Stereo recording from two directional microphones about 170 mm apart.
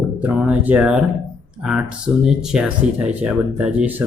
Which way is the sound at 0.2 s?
10° right (ahead or behind).